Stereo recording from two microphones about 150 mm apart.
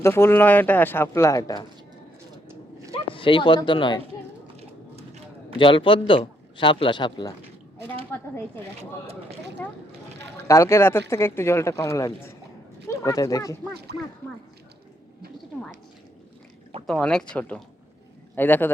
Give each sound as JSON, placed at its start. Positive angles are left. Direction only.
{"t": 0.0, "sound": "speech", "side_deg": 15}
{"t": 2.9, "sound": "speech", "side_deg": 35}
{"t": 4.6, "sound": "a sound", "side_deg": -45}
{"t": 5.5, "sound": "a man's voice", "side_deg": 35}
{"t": 8.8, "sound": "speech", "side_deg": -45}
{"t": 9.6, "sound": "speech", "side_deg": 15}
{"t": 16.8, "sound": "speech", "side_deg": 5}